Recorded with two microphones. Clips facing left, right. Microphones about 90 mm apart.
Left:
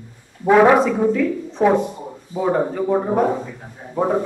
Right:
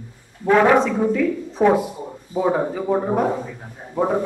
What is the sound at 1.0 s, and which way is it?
A woman's voice, 5° right (ahead or behind).